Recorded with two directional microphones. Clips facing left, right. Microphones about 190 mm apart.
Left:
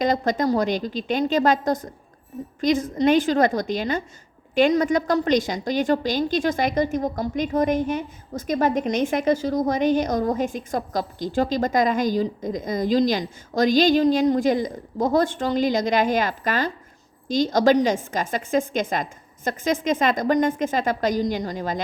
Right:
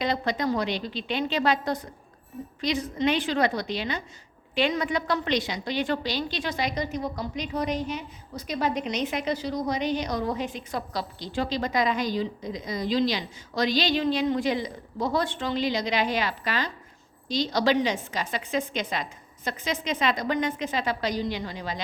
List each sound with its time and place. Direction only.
0.0 s a woman's voice: 45° left (ahead or behind)